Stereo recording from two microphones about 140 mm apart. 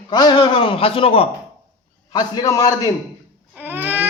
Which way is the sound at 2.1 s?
30° left (ahead or behind).